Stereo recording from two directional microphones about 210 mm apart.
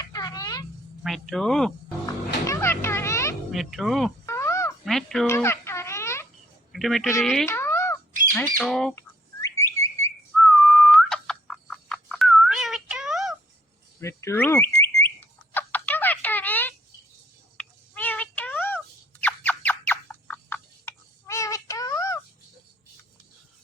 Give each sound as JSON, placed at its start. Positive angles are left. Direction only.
{"t": 0.0, "sound": "a sound", "side_deg": 15}
{"t": 1.0, "sound": "speech", "side_deg": 0}
{"t": 2.0, "sound": "music", "side_deg": 15}
{"t": 3.5, "sound": "speech", "side_deg": 0}
{"t": 4.3, "sound": "a sound", "side_deg": 15}
{"t": 4.9, "sound": "speech", "side_deg": 0}
{"t": 5.3, "sound": "music", "side_deg": 10}
{"t": 6.7, "sound": "speech", "side_deg": 0}
{"t": 7.4, "sound": "a sound", "side_deg": 10}
{"t": 8.5, "sound": "speech", "side_deg": 0}
{"t": 9.0, "sound": "bird", "side_deg": 15}
{"t": 10.3, "sound": "whistle", "side_deg": 0}
{"t": 14.0, "sound": "a sound", "side_deg": 15}